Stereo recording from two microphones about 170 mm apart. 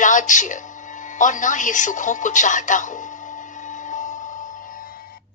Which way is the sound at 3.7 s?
45° left (ahead or behind).